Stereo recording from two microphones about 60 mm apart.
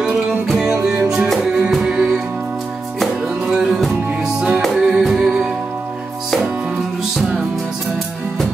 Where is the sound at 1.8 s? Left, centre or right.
Centre.